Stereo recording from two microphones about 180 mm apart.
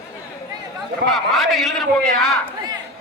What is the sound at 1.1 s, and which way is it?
Speech, centre (ahead or behind).